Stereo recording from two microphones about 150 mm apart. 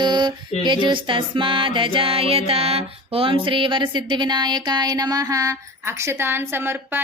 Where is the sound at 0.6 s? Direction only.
30° right (ahead or behind).